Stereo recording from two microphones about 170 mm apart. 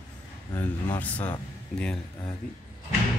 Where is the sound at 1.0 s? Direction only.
10° left (ahead or behind).